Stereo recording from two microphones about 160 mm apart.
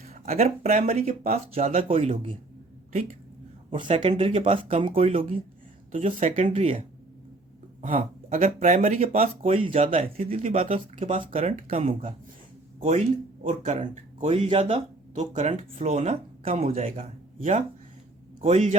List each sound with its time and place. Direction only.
0.1 s a sound: 45° right (ahead or behind)
0.6 s speech: 40° right (ahead or behind)
3.8 s speech: 40° right (ahead or behind)
6.5 s speech: 35° right (ahead or behind)
7.8 s speech: 50° right (ahead or behind)
8.5 s speech: 45° right (ahead or behind)
11.3 s speech: 45° right (ahead or behind)
13.4 s a man's voice: 50° right (ahead or behind)